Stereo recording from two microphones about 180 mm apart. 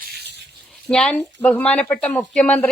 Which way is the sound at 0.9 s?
5° left (ahead or behind).